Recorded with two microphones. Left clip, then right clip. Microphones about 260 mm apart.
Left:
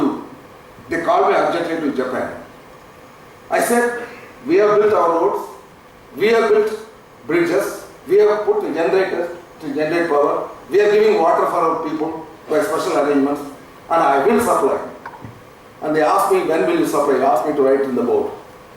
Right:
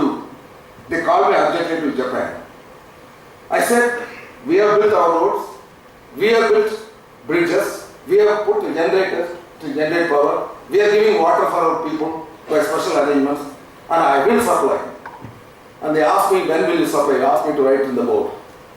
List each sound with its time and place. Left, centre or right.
0.9 s a man's voice: centre
3.6 s a man's voice: centre
16.1 s a man's voice: centre